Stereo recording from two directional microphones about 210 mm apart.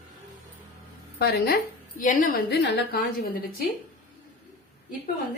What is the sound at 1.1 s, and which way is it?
A woman's voice, 50° left (ahead or behind).